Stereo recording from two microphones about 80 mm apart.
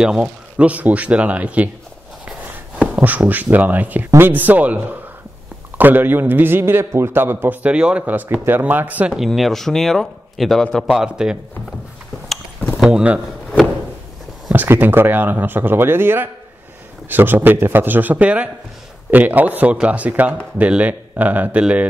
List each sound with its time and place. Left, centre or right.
0.0 s a man's voice: centre
3.0 s a man's voice: right
9.1 s speech: centre
12.7 s a sound: centre
14.5 s a man's voice: right